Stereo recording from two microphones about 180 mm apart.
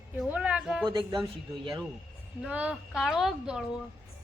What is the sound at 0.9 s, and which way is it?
Speech, 25° right (ahead or behind).